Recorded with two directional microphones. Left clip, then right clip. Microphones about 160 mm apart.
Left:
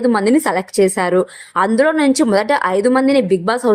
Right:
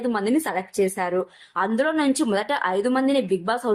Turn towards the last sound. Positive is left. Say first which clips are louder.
# left 8 dB
turn(degrees=45)  # may be behind; listen again after turning